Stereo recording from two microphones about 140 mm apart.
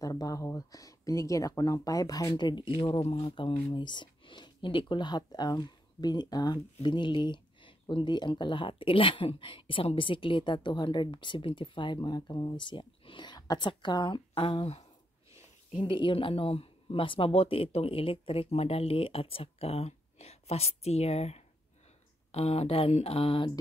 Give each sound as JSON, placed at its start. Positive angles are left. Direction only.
{"t": 0.0, "sound": "speech", "side_deg": 25}